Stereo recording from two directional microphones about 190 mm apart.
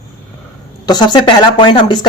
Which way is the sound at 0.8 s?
20° left (ahead or behind).